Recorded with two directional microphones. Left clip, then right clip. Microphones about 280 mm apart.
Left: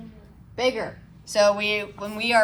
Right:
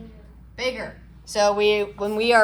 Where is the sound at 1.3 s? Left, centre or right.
Centre.